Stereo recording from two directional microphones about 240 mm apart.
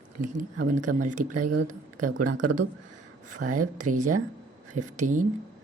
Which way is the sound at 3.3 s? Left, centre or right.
Right.